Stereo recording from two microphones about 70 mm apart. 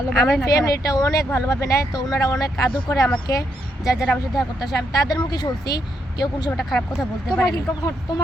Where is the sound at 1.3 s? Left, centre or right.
Left.